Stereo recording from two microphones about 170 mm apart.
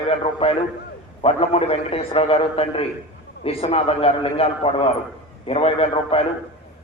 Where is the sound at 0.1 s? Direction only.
35° left (ahead or behind).